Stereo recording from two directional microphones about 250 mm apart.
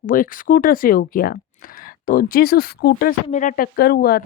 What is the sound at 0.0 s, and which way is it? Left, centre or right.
Speech, left.